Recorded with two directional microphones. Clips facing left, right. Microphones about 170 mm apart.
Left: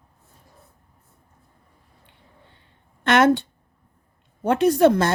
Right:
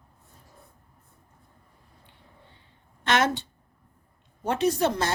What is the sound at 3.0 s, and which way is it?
A woman's voice, 55° left (ahead or behind).